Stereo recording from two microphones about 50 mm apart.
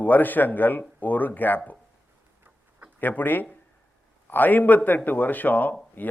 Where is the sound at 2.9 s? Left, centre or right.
Left.